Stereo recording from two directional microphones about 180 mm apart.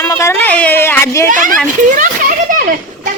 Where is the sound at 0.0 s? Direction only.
15° left (ahead or behind).